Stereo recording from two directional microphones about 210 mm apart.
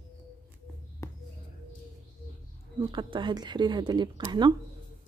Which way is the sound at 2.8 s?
20° right (ahead or behind).